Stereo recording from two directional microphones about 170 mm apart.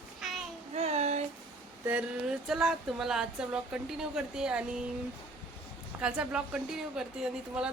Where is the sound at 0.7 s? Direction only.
40° right (ahead or behind).